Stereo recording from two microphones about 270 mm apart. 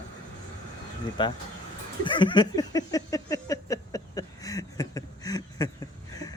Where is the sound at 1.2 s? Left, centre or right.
Centre.